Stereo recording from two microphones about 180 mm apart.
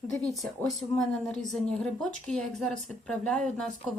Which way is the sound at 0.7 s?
5° left (ahead or behind).